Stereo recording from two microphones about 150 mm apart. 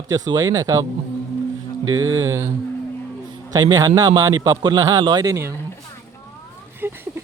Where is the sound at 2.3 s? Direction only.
20° right (ahead or behind).